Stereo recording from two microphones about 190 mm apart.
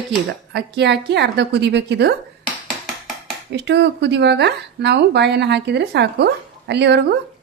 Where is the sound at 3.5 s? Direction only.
65° right (ahead or behind).